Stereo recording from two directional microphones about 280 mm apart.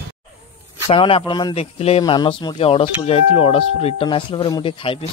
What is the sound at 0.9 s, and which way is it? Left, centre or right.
Speech, centre.